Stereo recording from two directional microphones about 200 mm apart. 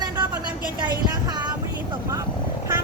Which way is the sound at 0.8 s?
20° right (ahead or behind).